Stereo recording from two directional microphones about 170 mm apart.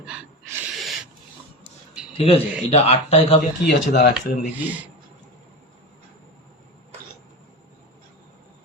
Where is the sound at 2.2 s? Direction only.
35° left (ahead or behind).